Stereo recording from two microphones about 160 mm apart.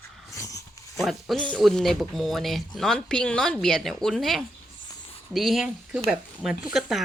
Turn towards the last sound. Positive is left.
turn(degrees=0)  # may be behind; listen again after turning